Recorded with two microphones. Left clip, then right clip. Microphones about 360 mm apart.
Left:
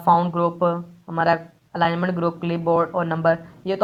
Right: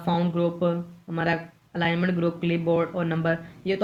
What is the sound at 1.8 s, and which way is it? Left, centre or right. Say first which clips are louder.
Speech: left 4 dB; centre.